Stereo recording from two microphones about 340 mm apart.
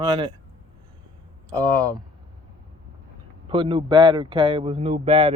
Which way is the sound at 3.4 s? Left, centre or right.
Centre.